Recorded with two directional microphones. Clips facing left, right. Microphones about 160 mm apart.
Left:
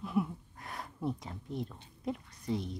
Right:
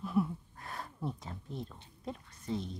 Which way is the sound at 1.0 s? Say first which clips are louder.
Left 5 dB; 15° left (ahead or behind).